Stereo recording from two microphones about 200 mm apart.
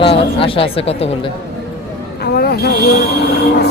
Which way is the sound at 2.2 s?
55° left (ahead or behind).